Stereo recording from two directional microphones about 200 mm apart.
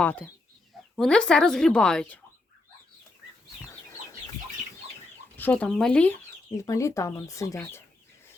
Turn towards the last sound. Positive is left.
turn(degrees=10)  # may be behind; listen again after turning